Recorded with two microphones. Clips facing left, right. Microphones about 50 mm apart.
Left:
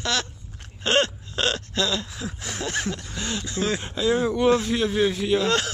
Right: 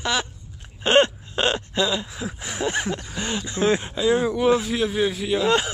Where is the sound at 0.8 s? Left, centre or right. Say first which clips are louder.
Right 4 dB; right.